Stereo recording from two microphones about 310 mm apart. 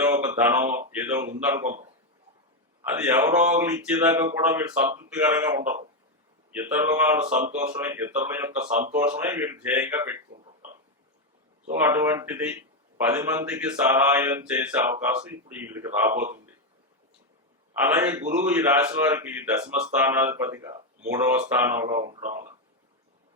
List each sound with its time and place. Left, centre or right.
0.0 s a sound: centre
0.9 s speech: centre
3.0 s speech: centre
8.6 s speech: right
8.9 s speech: centre
11.7 s speech: centre
17.8 s speech: centre
22.2 s speech: right